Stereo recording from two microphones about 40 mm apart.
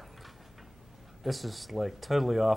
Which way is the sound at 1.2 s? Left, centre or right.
Centre.